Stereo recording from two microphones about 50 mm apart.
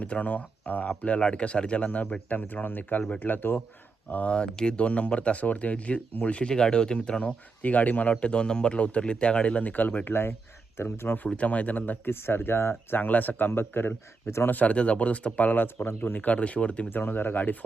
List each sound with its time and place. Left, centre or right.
0.0 s speech: left
4.1 s speech: left
8.1 s speech: centre; by 10.2 s left
10.8 s speech: left
11.3 s speech: left
12.0 s speech: left
13.0 s speech: left
13.5 s speech: left
14.4 s speech: left
15.6 s speech: left
16.2 s speech: left
16.9 s speech: left